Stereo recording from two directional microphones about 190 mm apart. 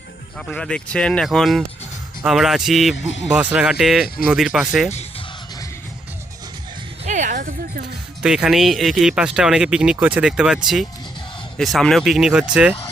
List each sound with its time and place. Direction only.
0.3 s speech: 5° left (ahead or behind)
2.9 s speech: 75° left (ahead or behind)
3.3 s speech: 5° right (ahead or behind)
4.9 s speech: 35° left (ahead or behind)
7.0 s speech: 40° right (ahead or behind)
8.2 s speech: 5° right (ahead or behind)